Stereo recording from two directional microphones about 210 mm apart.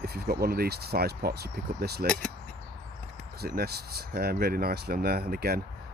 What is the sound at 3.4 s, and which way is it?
Speech, 50° right (ahead or behind).